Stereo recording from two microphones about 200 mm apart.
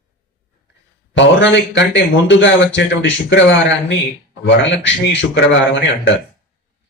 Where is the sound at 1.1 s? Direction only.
65° left (ahead or behind).